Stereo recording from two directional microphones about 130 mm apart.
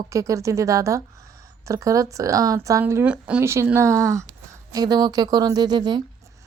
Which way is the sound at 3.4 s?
20° right (ahead or behind).